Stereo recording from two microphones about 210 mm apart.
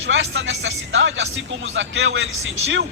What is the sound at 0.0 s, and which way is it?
Speech, 65° right (ahead or behind).